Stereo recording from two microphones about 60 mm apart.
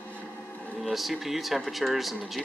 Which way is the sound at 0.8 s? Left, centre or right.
Centre.